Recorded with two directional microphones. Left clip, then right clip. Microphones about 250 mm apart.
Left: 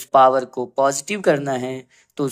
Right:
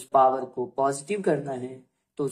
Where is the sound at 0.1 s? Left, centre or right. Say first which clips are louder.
Left 7 dB; left.